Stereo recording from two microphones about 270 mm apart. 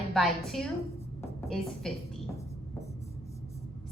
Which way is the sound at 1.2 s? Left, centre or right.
Centre.